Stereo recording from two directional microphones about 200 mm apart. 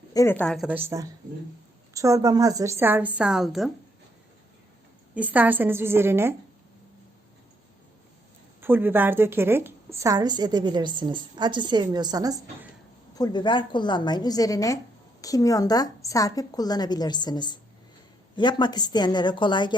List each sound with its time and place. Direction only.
0.1 s a woman's voice: 15° left (ahead or behind)
5.1 s a woman's voice: 10° right (ahead or behind)
8.6 s a woman's voice: 10° right (ahead or behind)
13.1 s a woman's voice: 20° left (ahead or behind)